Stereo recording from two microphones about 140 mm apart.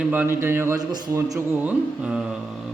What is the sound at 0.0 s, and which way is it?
A man's voice, 15° right (ahead or behind).